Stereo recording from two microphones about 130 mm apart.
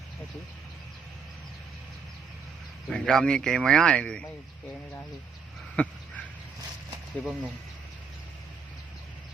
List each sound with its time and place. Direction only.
2.8 s speech: 5° left (ahead or behind)
5.7 s a sound: 10° left (ahead or behind)
6.9 s speech: 10° right (ahead or behind)